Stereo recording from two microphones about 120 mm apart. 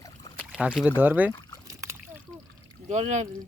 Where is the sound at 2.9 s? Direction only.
75° right (ahead or behind).